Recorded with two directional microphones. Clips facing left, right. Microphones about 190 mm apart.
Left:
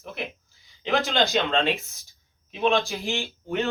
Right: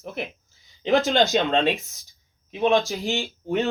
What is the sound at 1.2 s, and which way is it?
Speech, 15° right (ahead or behind).